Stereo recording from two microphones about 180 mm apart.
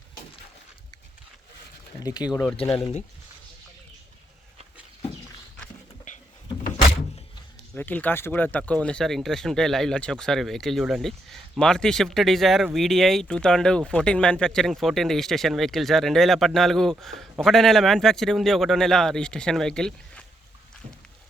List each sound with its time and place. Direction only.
2.0 s speech: 20° left (ahead or behind)
2.7 s speech: 30° left (ahead or behind)
7.8 s speech: 10° left (ahead or behind)